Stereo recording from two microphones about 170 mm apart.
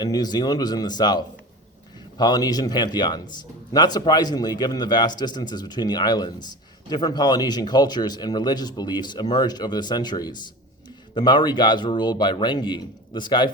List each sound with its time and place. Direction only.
0.0 s a man's voice: 25° left (ahead or behind)